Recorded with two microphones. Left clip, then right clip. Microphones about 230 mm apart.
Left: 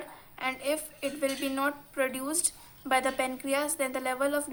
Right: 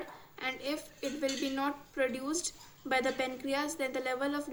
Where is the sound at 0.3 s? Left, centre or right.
Left.